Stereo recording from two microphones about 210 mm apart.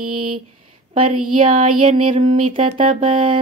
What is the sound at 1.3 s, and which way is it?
Mantra, 40° right (ahead or behind).